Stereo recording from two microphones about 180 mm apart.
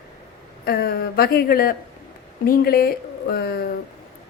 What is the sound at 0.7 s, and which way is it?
A woman's voice, 60° left (ahead or behind).